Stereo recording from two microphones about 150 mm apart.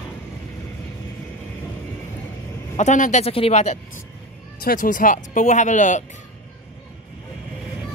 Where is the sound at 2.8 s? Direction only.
55° left (ahead or behind).